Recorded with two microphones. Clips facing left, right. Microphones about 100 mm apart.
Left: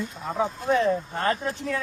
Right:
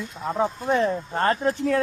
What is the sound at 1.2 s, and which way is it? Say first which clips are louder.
Speech: right 4 dB; 45° right (ahead or behind).